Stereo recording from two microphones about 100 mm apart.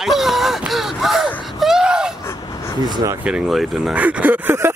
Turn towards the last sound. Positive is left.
turn(degrees=-20)  # may be behind; listen again after turning